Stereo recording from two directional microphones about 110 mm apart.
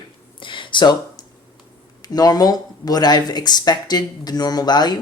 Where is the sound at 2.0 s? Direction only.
35° left (ahead or behind).